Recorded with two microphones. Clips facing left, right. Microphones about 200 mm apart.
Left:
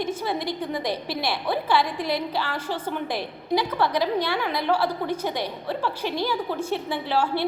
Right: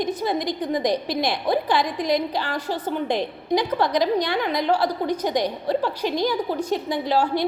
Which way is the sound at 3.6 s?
15° right (ahead or behind).